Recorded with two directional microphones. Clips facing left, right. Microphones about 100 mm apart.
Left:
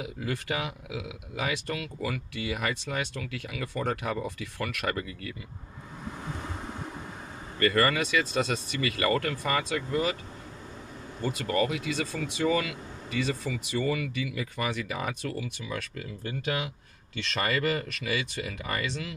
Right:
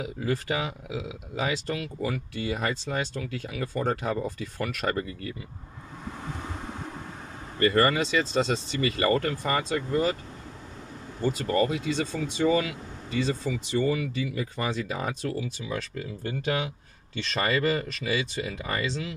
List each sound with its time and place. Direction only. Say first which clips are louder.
0.0 s speech: right 4 dB; 30° right (ahead or behind)
7.5 s speech: right 2 dB; 25° right (ahead or behind)
11.3 s speech: right 1 dB; 30° right (ahead or behind)